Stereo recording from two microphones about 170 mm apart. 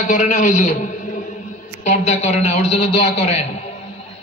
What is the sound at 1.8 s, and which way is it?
A man's voice, 40° left (ahead or behind).